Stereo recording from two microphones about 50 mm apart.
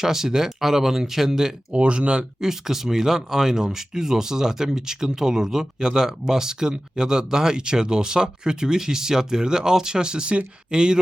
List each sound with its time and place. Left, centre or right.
0.0 s speech: centre
1.7 s speech: right
2.5 s speech: centre